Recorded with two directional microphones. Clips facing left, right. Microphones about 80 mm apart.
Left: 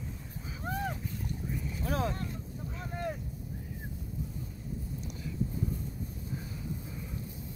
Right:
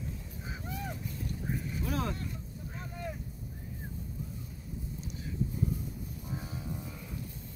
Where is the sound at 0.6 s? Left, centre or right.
Left.